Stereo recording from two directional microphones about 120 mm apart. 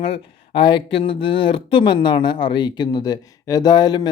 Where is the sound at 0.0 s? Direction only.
50° left (ahead or behind).